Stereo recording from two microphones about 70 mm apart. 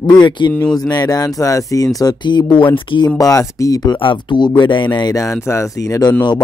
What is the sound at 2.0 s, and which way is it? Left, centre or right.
Speech, left.